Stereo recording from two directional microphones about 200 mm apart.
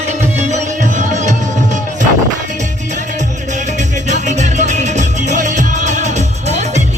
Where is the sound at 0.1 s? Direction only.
35° right (ahead or behind).